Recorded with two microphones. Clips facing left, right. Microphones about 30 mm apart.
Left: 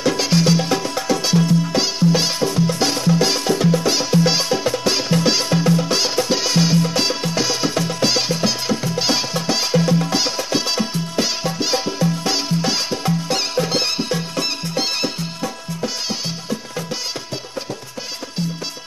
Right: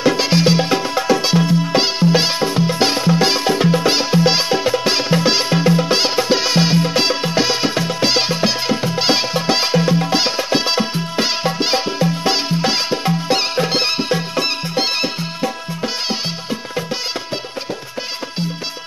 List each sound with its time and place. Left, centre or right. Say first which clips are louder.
0.0 s music: right 3 dB; right